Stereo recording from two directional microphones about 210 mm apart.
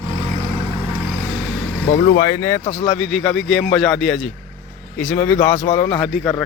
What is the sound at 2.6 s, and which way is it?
Speech, 25° left (ahead or behind).